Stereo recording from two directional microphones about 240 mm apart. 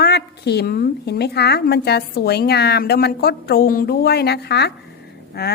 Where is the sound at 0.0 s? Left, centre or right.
Left.